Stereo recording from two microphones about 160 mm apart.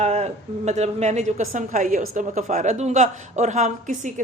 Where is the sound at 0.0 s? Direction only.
45° right (ahead or behind).